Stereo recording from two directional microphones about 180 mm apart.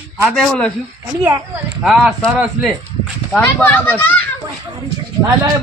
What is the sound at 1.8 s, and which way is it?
A man's voice, centre (ahead or behind).